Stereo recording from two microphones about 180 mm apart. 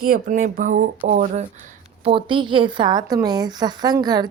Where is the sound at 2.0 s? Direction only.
30° right (ahead or behind).